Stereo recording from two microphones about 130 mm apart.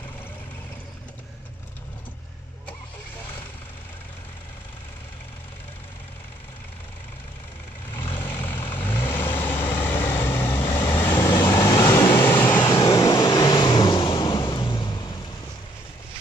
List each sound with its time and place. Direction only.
8.1 s vehicle: 15° left (ahead or behind)
10.6 s vehicle: 35° left (ahead or behind)
11.0 s vehicle: 20° left (ahead or behind)
11.2 s vehicle: 35° left (ahead or behind)
12.3 s vehicle: 15° left (ahead or behind)
12.6 s vehicle: 30° left (ahead or behind)